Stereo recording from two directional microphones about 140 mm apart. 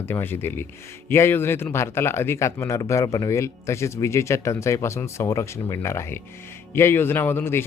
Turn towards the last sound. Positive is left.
turn(degrees=15)  # may be behind; listen again after turning